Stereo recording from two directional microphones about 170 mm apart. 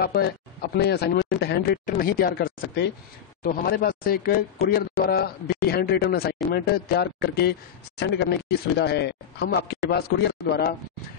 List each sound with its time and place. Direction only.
0.0 s a man's voice: 65° left (ahead or behind)
1.9 s a man's voice: 60° left (ahead or behind)